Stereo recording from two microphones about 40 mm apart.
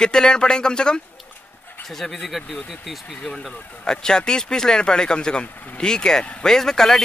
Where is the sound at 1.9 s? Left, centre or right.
Centre.